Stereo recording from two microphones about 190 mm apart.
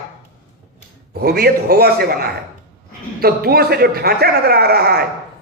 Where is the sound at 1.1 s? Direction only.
55° right (ahead or behind).